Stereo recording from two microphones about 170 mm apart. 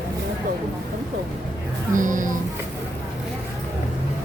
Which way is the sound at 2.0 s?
50° right (ahead or behind).